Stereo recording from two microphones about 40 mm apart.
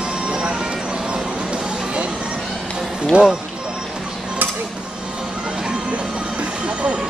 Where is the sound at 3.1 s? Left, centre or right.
Right.